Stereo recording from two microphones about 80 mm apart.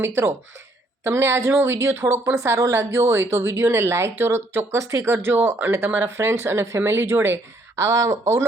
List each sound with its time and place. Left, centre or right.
0.0 s a woman's voice: right
7.8 s a woman's voice: right